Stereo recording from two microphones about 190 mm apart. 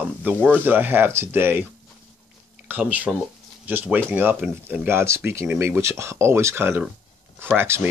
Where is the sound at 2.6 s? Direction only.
10° right (ahead or behind).